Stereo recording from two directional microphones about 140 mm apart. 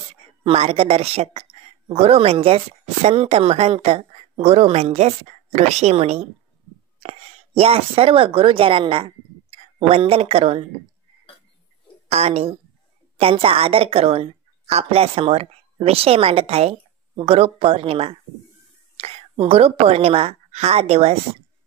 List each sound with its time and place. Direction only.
0.5 s speech: 45° right (ahead or behind)
12.1 s a woman's voice: 45° right (ahead or behind)